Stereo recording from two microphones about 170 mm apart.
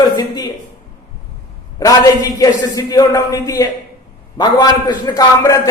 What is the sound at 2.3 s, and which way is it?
Speech, 20° left (ahead or behind).